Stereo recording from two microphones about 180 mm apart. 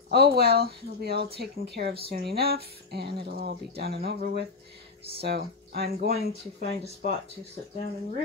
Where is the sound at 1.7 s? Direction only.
65° right (ahead or behind).